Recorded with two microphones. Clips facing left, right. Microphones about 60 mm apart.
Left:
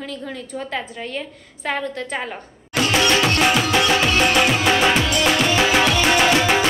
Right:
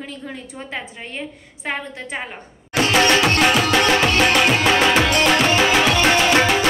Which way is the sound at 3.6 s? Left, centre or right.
Right.